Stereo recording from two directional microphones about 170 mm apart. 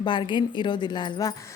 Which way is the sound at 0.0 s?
30° left (ahead or behind).